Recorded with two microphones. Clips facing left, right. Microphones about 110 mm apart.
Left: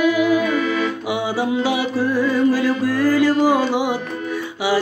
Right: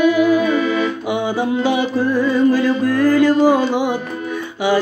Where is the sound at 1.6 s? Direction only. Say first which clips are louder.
Right 3 dB; 10° left (ahead or behind).